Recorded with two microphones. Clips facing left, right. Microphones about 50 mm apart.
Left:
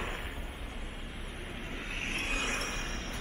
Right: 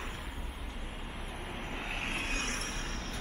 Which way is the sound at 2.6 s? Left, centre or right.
Left.